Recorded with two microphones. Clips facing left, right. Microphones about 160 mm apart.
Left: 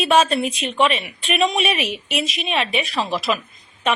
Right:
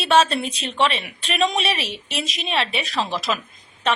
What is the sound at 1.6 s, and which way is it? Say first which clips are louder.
Speech: left 3 dB; 30° right (ahead or behind).